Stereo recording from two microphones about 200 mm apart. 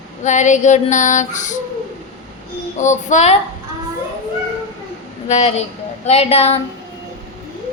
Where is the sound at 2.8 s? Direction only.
35° left (ahead or behind).